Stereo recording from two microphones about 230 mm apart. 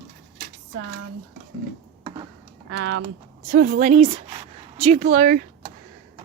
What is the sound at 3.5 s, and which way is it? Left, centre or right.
Speech, right.